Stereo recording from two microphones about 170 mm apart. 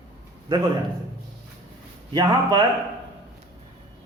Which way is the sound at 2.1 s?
25° right (ahead or behind).